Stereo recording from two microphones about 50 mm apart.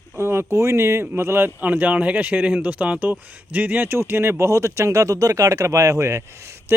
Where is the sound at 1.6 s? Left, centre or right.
Right.